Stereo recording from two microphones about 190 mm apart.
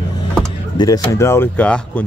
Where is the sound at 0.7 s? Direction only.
20° left (ahead or behind).